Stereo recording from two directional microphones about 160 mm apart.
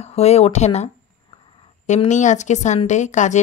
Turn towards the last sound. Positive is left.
turn(degrees=50)  # may be behind; listen again after turning